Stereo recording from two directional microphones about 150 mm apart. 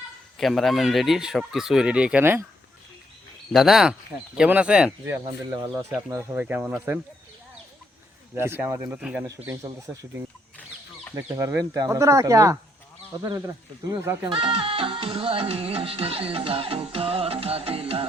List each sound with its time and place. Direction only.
0.3 s speech: centre (ahead or behind)
3.5 s speech: centre (ahead or behind)
5.2 s speech: 30° right (ahead or behind)
6.3 s speech: 10° right (ahead or behind)
8.4 s speech: 15° right (ahead or behind)
9.2 s speech: 20° right (ahead or behind)
14.3 s music: 35° right (ahead or behind)